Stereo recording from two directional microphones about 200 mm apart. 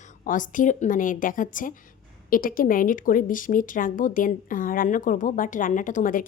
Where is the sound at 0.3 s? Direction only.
40° left (ahead or behind).